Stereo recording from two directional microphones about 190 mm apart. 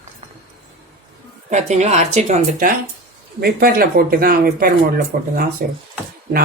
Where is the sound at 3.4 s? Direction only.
55° right (ahead or behind).